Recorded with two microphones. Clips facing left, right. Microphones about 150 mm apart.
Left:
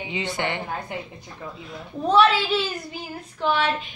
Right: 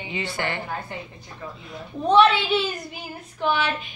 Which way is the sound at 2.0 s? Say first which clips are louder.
Right 1 dB; 5° left (ahead or behind).